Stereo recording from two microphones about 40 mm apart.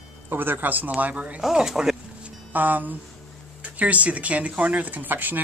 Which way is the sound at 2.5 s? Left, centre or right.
Right.